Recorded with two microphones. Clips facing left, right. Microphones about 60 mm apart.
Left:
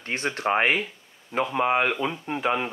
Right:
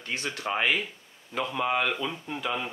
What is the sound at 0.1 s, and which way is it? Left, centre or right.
Speech, left.